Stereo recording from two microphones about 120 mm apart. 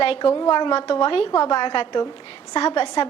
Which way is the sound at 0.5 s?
40° left (ahead or behind).